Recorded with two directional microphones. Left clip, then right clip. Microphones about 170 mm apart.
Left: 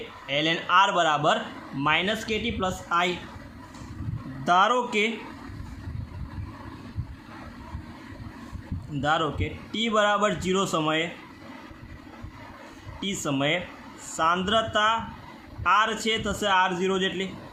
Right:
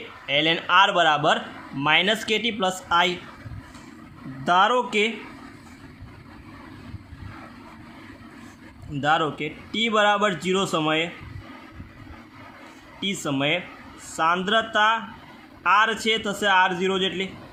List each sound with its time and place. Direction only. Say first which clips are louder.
0.3 s a man's voice: right 3 dB; 15° right (ahead or behind)
4.4 s a man's voice: right 2 dB; 15° right (ahead or behind)
9.0 s a man's voice: right 3 dB; 20° right (ahead or behind)
13.0 s a man's voice: right 2 dB; 15° right (ahead or behind)